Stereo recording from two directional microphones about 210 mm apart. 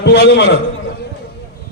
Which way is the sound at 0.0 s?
55° left (ahead or behind).